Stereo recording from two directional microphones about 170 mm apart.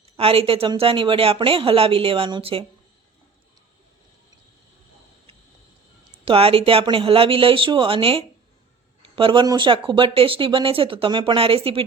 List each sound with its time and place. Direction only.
0.0 s speech: 35° right (ahead or behind)
6.2 s speech: 35° right (ahead or behind)